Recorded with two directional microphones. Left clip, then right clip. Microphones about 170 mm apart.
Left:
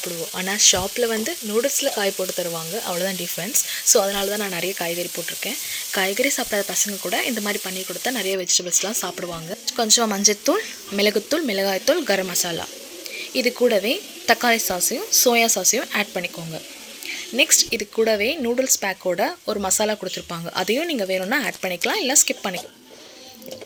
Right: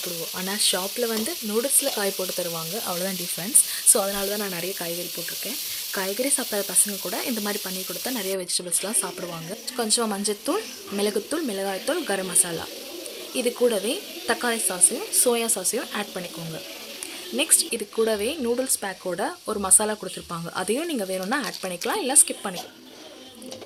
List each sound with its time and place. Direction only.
0.3 s speech: 5° left (ahead or behind)
3.9 s frying: 5° left (ahead or behind)
6.2 s frying: 5° left (ahead or behind)
17.3 s speech: 5° left (ahead or behind)